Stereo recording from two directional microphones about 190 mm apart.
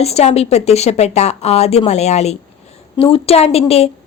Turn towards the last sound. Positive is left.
turn(degrees=30)  # may be behind; listen again after turning